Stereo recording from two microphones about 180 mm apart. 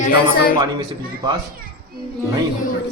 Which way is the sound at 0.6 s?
25° right (ahead or behind).